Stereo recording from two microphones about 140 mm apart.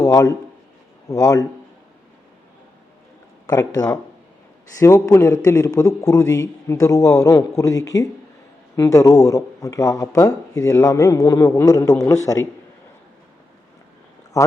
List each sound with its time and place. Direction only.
0.0 s a man's voice: 25° left (ahead or behind)
3.4 s speech: 25° left (ahead or behind)
14.3 s speech: 20° left (ahead or behind)